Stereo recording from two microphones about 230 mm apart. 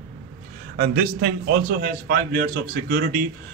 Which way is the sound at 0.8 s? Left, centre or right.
Right.